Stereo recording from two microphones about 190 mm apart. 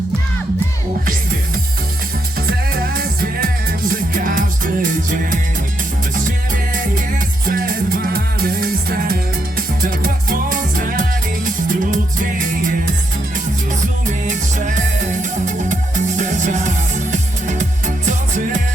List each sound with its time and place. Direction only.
2.5 s music: 50° right (ahead or behind)
7.4 s music: 50° right (ahead or behind)
14.3 s music: 40° right (ahead or behind)